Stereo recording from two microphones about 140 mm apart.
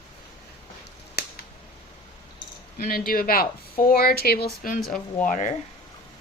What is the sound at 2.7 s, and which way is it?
Speech, 90° left.